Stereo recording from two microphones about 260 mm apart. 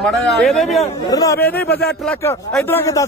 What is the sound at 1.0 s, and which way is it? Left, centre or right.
Speech, centre.